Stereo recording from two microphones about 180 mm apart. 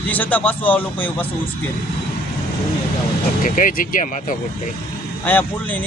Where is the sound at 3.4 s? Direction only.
50° left (ahead or behind).